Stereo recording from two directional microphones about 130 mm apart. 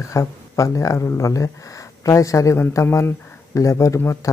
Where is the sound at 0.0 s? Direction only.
25° left (ahead or behind).